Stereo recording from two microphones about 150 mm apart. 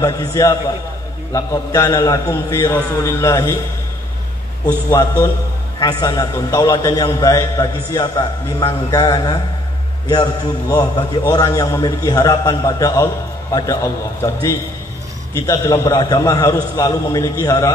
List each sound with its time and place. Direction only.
0.0 s a man's voice: 25° left (ahead or behind)
4.6 s a man's voice: 20° left (ahead or behind)
10.7 s a man's voice: 25° left (ahead or behind)